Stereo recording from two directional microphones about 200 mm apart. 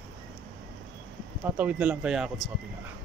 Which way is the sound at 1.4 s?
10° right (ahead or behind).